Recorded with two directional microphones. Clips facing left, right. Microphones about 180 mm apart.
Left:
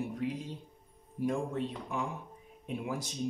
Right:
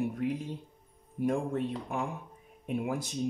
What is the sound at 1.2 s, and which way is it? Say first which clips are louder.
Speech: right 3 dB; 55° right (ahead or behind).